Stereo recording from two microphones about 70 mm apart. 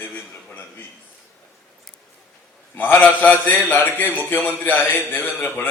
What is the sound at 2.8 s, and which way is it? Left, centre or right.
A man's voice, left.